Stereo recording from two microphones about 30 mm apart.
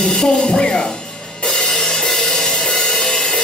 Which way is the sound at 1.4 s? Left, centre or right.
Centre.